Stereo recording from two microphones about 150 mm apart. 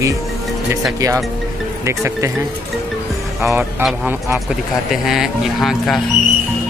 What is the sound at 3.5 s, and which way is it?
Speech, 15° right (ahead or behind).